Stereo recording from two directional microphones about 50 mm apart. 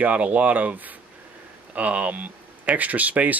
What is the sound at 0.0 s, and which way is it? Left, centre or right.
Speech, right.